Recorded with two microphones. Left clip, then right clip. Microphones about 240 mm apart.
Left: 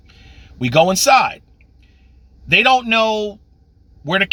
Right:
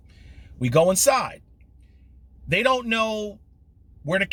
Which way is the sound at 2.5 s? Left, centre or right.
Centre.